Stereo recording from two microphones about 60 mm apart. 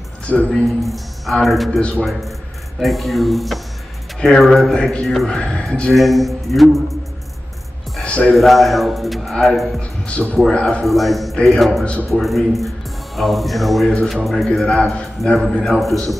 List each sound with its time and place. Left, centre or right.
0.3 s speech: left
0.7 s a man's voice: centre
1.8 s speech: centre
2.8 s a man's voice: centre
5.4 s a man's voice: centre
5.9 s a man's voice: centre
8.0 s music: centre
8.4 s a man's voice: centre
9.8 s a man's voice: centre
10.9 s a man's voice: centre
11.8 s speech: left
12.2 s a man's voice: centre
14.7 s a man's voice: centre
15.7 s a man's voice: centre